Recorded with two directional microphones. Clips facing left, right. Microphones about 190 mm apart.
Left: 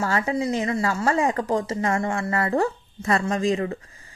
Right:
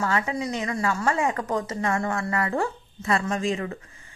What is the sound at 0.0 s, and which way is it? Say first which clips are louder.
Speech: left 3 dB; 35° left (ahead or behind).